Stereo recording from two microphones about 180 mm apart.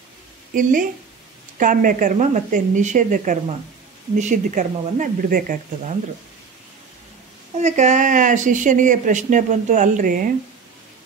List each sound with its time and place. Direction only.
0.6 s speech: 45° right (ahead or behind)
7.5 s speech: 40° right (ahead or behind)